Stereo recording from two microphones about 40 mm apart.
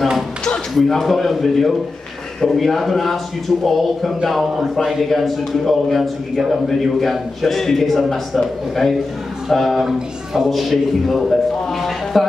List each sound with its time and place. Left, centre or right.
0.7 s a man's voice: centre
9.8 s speech: centre
10.5 s a man's voice: centre